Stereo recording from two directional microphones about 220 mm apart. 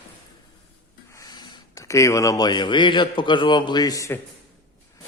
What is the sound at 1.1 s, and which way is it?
Speech, 15° left (ahead or behind).